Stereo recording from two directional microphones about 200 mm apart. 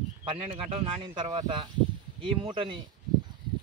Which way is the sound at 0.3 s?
25° right (ahead or behind).